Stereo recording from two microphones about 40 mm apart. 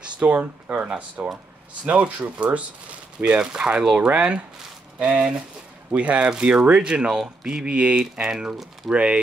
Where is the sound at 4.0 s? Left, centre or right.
Right.